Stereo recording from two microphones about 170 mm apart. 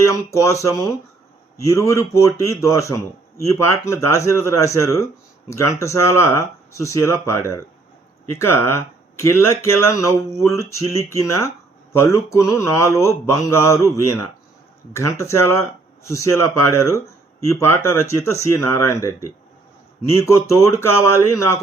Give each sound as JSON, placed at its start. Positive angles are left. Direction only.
{"t": 0.0, "sound": "speech", "side_deg": 15}